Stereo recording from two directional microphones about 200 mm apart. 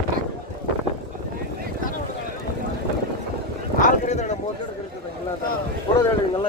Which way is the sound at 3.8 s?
40° left (ahead or behind).